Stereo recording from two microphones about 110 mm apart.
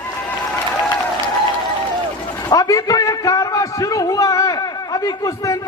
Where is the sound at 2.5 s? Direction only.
30° left (ahead or behind).